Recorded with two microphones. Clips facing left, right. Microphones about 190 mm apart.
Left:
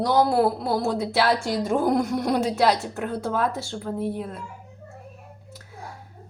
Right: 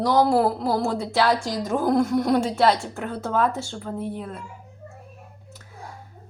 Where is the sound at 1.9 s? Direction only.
5° left (ahead or behind).